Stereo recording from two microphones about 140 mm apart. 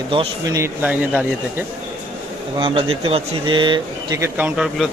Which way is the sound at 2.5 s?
40° right (ahead or behind).